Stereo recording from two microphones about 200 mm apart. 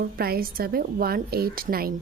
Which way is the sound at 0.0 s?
50° right (ahead or behind).